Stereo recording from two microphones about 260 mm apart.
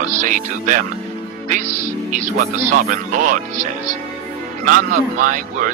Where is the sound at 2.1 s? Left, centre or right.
Right.